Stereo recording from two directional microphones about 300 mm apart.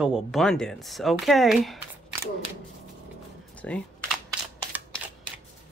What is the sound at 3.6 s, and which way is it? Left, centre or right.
Speech, centre.